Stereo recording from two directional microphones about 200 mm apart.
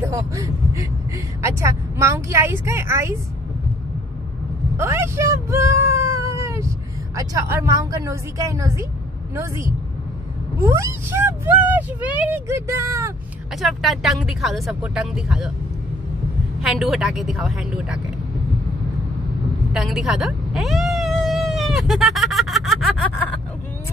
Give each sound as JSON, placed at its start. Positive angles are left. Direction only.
{"t": 0.0, "sound": "speech", "side_deg": -15}
{"t": 4.7, "sound": "meow", "side_deg": -15}
{"t": 7.2, "sound": "speech", "side_deg": -15}
{"t": 13.6, "sound": "speech", "side_deg": 0}
{"t": 16.6, "sound": "speech", "side_deg": 0}
{"t": 19.7, "sound": "a sound", "side_deg": 0}